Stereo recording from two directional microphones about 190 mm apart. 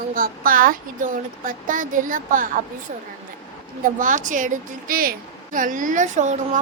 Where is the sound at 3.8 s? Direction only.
45° right (ahead or behind).